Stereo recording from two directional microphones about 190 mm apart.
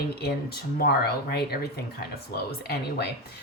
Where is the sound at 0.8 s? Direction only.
55° left (ahead or behind).